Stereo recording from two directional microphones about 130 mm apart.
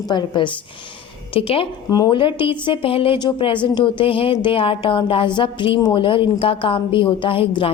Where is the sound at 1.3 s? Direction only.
45° left (ahead or behind).